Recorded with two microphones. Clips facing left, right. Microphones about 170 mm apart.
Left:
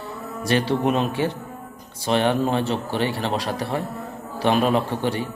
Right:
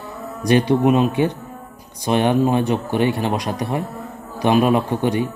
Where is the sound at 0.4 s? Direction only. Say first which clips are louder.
Right 5 dB; 15° right (ahead or behind).